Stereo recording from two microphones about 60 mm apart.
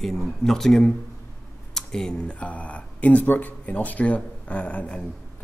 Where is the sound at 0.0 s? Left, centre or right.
Centre.